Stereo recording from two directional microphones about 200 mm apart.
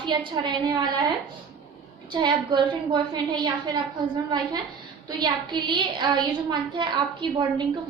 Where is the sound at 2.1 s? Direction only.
20° right (ahead or behind).